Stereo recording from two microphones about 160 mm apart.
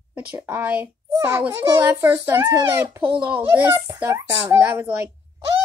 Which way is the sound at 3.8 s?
20° right (ahead or behind).